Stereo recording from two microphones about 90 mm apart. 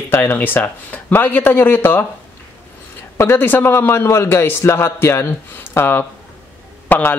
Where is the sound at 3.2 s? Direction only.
25° left (ahead or behind).